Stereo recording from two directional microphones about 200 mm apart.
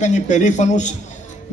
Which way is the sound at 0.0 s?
35° left (ahead or behind).